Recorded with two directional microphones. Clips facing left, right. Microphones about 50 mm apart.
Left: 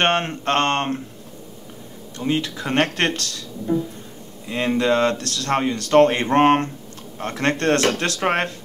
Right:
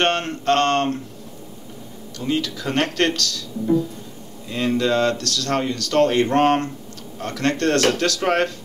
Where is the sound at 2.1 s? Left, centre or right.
Left.